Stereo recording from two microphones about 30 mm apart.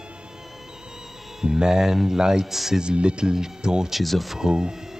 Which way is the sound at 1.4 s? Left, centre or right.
Right.